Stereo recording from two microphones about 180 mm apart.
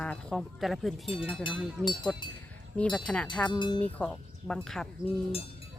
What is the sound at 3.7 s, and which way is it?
Speech, 10° left (ahead or behind).